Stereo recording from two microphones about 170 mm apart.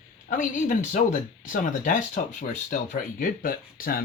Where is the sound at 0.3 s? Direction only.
50° left (ahead or behind).